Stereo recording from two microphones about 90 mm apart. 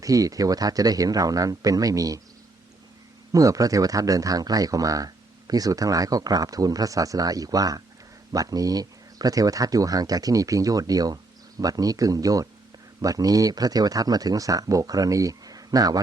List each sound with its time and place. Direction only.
0.0 s speech: 40° right (ahead or behind)
3.3 s speech: 40° right (ahead or behind)